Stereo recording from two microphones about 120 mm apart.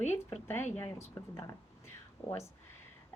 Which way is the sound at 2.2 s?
30° left (ahead or behind).